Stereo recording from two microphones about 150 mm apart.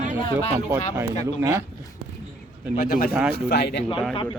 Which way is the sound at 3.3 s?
90° left.